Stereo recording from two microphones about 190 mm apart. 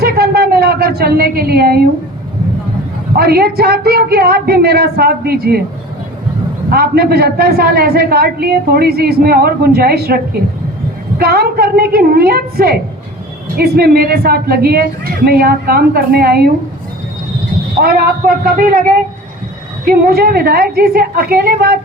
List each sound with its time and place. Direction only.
0.0 s a sound: 55° right (ahead or behind)
3.2 s speech: 55° right (ahead or behind)
6.7 s a woman's voice: 55° right (ahead or behind)
11.2 s a woman's voice: 55° right (ahead or behind)
17.7 s speech: 55° right (ahead or behind)
19.8 s a woman's voice: 50° right (ahead or behind)